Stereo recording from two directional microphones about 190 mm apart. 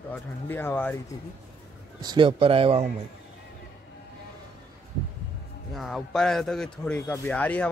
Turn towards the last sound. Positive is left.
turn(degrees=5)  # may be behind; listen again after turning